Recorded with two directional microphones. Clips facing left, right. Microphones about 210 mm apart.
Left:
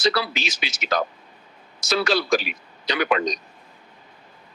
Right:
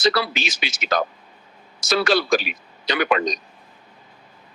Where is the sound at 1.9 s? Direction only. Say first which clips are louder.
Right 2 dB; 50° right (ahead or behind).